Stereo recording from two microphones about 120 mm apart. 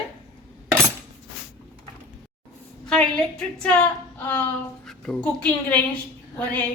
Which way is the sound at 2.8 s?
5° left (ahead or behind).